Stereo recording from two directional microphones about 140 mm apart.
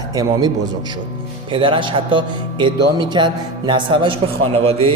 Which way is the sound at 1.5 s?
35° right (ahead or behind).